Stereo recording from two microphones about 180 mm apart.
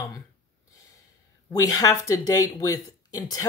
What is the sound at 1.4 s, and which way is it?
Speech, 20° left (ahead or behind).